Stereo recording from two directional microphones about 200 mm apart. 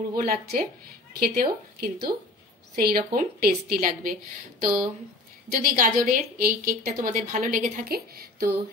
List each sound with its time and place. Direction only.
0.1 s a woman's voice: 45° right (ahead or behind)